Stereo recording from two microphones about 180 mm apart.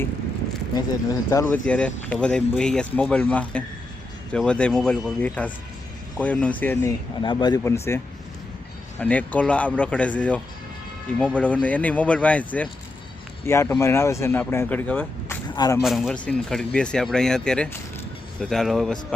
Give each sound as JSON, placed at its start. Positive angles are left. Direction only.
{"t": 1.1, "sound": "speech", "side_deg": 15}
{"t": 1.6, "sound": "speech", "side_deg": 5}
{"t": 7.2, "sound": "speech", "side_deg": 25}
{"t": 15.5, "sound": "speech", "side_deg": 20}
{"t": 15.8, "sound": "speech", "side_deg": 0}